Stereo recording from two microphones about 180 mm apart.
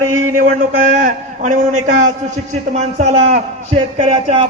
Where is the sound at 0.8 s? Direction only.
50° right (ahead or behind).